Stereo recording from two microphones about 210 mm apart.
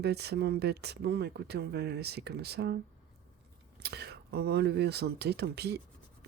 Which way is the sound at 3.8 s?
50° right (ahead or behind).